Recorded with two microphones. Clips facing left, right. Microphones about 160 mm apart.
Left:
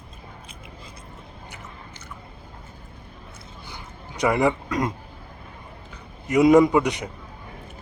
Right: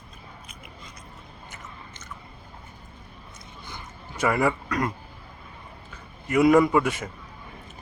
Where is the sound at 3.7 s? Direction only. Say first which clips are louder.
Left 1 dB; 15° left (ahead or behind).